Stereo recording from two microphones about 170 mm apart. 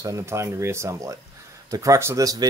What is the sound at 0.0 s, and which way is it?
Speech, 15° right (ahead or behind).